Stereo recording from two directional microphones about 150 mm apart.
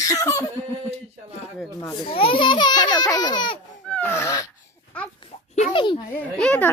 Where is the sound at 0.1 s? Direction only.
20° left (ahead or behind).